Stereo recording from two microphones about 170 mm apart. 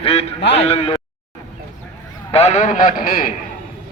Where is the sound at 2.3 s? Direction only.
40° left (ahead or behind); by 3.3 s 55° left (ahead or behind).